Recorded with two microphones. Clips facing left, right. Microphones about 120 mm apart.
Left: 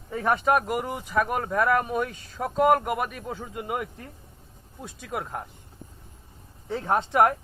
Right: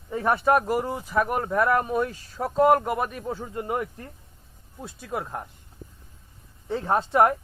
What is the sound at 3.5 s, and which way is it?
Speech, 10° left (ahead or behind).